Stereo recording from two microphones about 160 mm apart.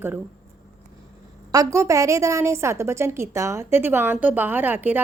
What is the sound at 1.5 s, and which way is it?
A woman's voice, 20° right (ahead or behind).